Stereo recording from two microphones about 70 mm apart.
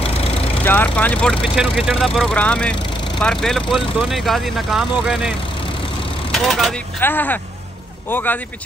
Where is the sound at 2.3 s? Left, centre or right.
Centre.